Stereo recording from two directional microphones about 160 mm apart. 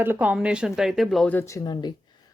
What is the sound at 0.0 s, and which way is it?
Speech, 10° right (ahead or behind).